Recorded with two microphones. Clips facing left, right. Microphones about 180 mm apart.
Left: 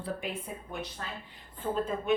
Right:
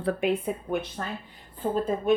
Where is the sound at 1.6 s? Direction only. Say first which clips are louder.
Right 5 dB; 35° right (ahead or behind).